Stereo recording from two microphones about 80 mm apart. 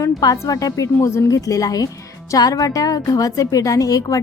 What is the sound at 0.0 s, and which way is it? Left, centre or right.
A woman's voice, left.